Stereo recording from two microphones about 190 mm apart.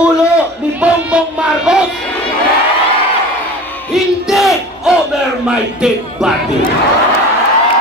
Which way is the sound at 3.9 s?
Centre (ahead or behind).